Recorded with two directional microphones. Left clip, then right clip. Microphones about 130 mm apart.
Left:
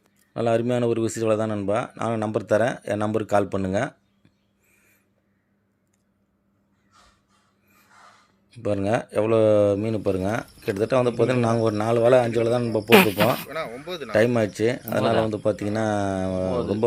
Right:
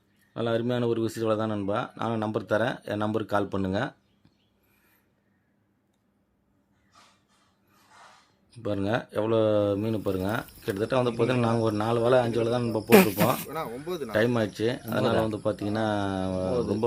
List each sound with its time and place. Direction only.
0.3 s speech: 25° left (ahead or behind)
8.6 s speech: 25° left (ahead or behind)
12.9 s speech: 5° right (ahead or behind)
14.1 s speech: 20° left (ahead or behind)
15.0 s speech: 5° left (ahead or behind)
15.3 s speech: 25° left (ahead or behind)